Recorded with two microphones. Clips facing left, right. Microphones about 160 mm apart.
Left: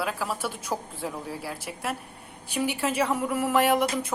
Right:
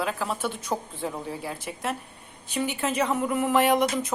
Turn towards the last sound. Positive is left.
turn(degrees=5)  # may be behind; listen again after turning